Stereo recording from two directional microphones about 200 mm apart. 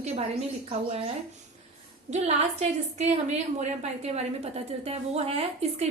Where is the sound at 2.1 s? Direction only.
35° right (ahead or behind).